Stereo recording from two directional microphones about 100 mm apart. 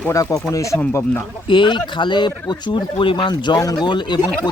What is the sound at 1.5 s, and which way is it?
Speech, 55° left (ahead or behind).